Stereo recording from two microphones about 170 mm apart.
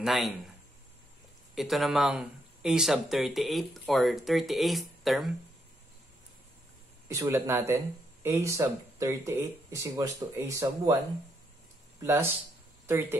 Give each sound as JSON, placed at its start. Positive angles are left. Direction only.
{"t": 0.0, "sound": "speech", "side_deg": 0}
{"t": 1.5, "sound": "speech", "side_deg": 0}
{"t": 7.1, "sound": "speech", "side_deg": -15}
{"t": 12.0, "sound": "speech", "side_deg": -15}